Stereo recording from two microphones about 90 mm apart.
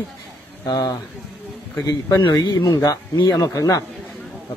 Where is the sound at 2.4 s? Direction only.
40° left (ahead or behind).